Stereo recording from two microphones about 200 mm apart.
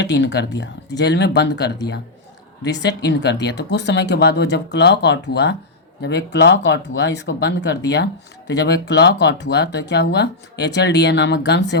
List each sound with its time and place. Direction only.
0.0 s speech: 60° left (ahead or behind)